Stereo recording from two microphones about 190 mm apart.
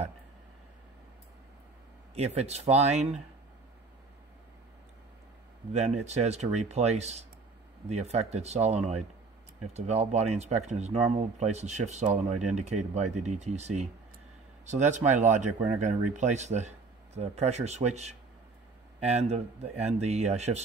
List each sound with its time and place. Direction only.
2.1 s speech: 35° right (ahead or behind)
5.7 s speech: 35° right (ahead or behind)